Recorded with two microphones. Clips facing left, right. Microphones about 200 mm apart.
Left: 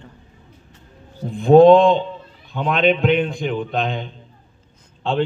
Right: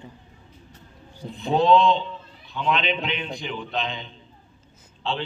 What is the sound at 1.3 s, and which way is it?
A man's voice, 50° left (ahead or behind).